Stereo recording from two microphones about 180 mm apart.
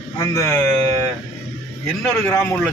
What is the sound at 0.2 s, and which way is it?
Speech, 15° left (ahead or behind).